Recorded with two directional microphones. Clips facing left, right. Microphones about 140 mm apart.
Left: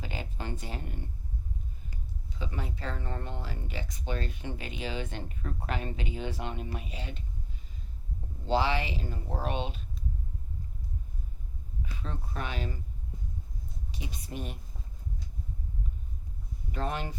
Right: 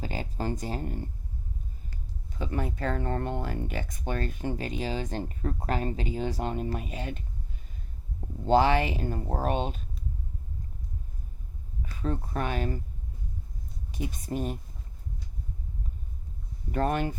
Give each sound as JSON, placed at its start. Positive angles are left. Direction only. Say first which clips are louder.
{"t": 0.0, "sound": "speech", "louder": "right 6 dB", "side_deg": -40}
{"t": 2.3, "sound": "speech", "louder": "right 6 dB", "side_deg": -50}
{"t": 8.4, "sound": "speech", "louder": "right 6 dB", "side_deg": -50}
{"t": 11.8, "sound": "speech", "louder": "right 8 dB", "side_deg": -45}
{"t": 13.9, "sound": "speech", "louder": "right 8 dB", "side_deg": -50}
{"t": 16.7, "sound": "speech", "louder": "right 7 dB", "side_deg": -50}